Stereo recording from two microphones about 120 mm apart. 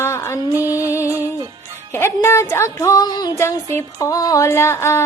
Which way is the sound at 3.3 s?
20° left (ahead or behind).